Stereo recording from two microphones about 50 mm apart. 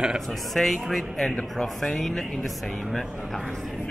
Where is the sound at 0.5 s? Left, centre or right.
Centre.